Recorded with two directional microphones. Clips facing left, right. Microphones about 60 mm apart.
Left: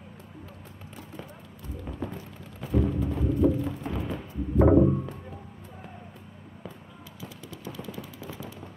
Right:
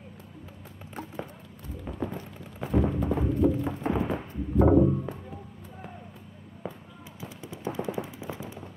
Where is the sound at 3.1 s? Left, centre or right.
Right.